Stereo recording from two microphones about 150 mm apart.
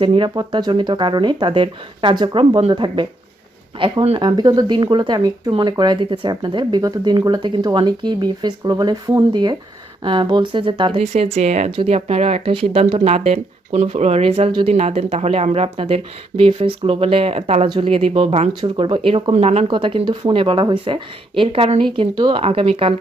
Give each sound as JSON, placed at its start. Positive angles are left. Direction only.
{"t": 0.0, "sound": "speech", "side_deg": -35}